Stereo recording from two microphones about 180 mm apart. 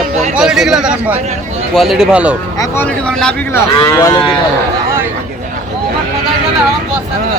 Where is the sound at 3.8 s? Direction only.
20° left (ahead or behind).